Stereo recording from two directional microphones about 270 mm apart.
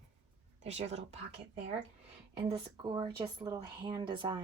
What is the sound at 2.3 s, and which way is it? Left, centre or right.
A woman's voice, centre.